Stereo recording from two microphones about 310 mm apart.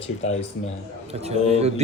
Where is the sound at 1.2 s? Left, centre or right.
Centre.